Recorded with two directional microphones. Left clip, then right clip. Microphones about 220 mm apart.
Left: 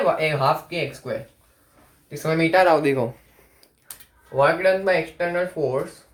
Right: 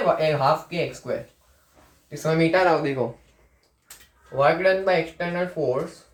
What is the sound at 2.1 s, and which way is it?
Speech, 40° left (ahead or behind).